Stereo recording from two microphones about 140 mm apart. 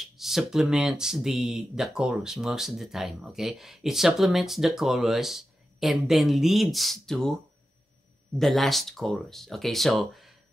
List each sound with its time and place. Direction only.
0.2 s speech: centre (ahead or behind)
8.4 s speech: centre (ahead or behind)